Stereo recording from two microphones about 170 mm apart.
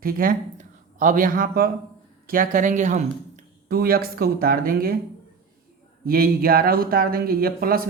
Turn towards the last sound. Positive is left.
turn(degrees=-60)  # may be behind; listen again after turning